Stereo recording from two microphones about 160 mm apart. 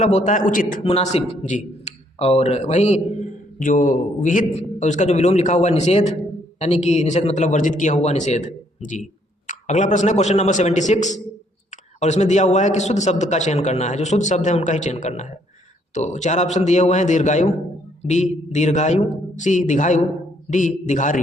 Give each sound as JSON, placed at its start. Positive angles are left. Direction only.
{"t": 0.0, "sound": "a man's voice", "side_deg": 45}
{"t": 0.8, "sound": "a man's voice", "side_deg": 40}